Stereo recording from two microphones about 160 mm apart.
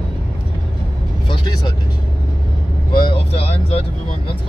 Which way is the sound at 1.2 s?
30° left (ahead or behind).